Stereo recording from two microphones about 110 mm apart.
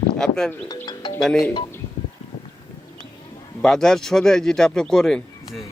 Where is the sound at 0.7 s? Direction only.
40° left (ahead or behind).